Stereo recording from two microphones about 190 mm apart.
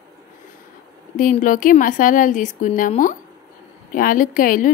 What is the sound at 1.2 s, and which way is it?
Speech, 45° left (ahead or behind).